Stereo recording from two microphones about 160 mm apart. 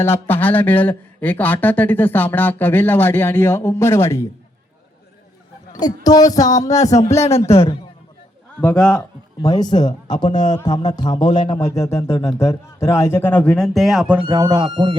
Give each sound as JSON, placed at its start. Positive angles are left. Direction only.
{"t": 0.0, "sound": "speech", "side_deg": 15}
{"t": 5.8, "sound": "a man's voice", "side_deg": 25}
{"t": 7.5, "sound": "a man's voice", "side_deg": 35}
{"t": 8.6, "sound": "speech", "side_deg": 5}
{"t": 9.4, "sound": "a man's voice", "side_deg": 25}
{"t": 14.2, "sound": "speech", "side_deg": -25}